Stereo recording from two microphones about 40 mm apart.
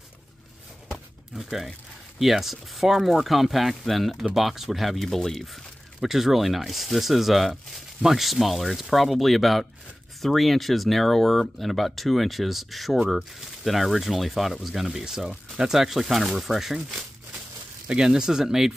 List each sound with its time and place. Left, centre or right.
1.4 s speech: centre
5.9 s speech: centre
17.8 s speech: right